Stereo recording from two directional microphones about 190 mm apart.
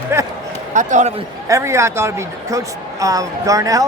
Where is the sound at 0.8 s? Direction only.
40° right (ahead or behind).